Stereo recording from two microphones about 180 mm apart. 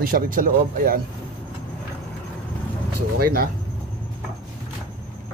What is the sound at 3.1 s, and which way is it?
Speech, 55° right (ahead or behind).